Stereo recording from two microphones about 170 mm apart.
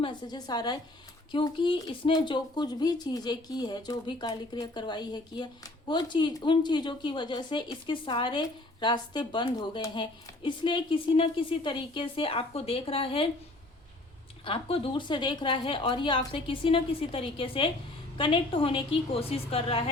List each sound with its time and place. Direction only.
0.0 s a woman's voice: 25° left (ahead or behind)
14.4 s a woman's voice: 30° left (ahead or behind)